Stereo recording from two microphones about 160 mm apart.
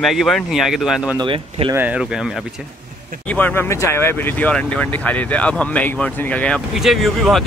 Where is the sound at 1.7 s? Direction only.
10° right (ahead or behind).